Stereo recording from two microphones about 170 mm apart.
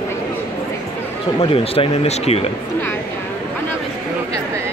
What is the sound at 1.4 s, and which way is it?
Speech, 35° left (ahead or behind).